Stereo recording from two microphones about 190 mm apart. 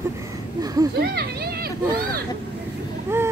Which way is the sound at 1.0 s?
55° right (ahead or behind).